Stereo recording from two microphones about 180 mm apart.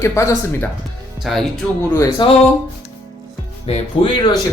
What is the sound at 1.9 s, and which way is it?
Speech, 20° left (ahead or behind).